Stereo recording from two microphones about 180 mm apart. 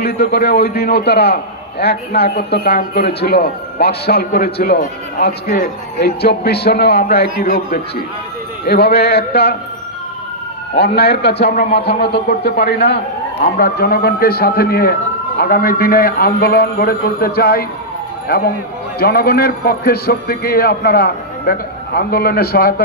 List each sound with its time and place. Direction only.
0.0 s a man's voice: 60° left (ahead or behind)
8.6 s a man's voice: 65° left (ahead or behind)
10.8 s a man's voice: 65° left (ahead or behind)